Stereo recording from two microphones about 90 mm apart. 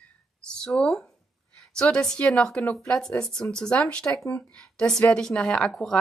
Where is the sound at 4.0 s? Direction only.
35° left (ahead or behind).